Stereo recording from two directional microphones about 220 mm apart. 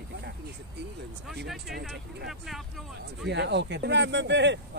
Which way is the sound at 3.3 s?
50° right (ahead or behind).